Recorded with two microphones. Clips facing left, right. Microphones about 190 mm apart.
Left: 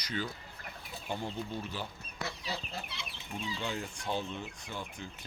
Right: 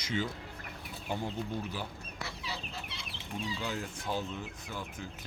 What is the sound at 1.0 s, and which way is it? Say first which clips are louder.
Speech: right 2 dB; 10° right (ahead or behind).